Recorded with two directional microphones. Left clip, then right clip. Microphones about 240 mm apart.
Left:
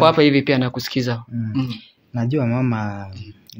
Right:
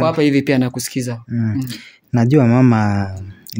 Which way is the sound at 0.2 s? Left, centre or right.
Right.